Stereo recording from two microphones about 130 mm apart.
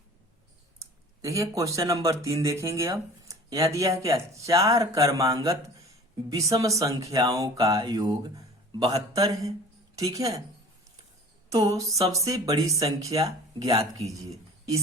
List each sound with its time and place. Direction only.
0.8 s speech: 25° right (ahead or behind)
11.5 s speech: 25° right (ahead or behind)